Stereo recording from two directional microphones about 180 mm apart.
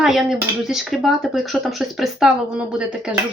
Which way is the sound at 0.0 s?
Centre (ahead or behind).